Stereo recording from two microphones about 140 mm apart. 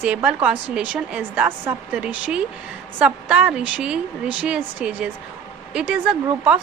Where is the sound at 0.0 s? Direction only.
10° right (ahead or behind).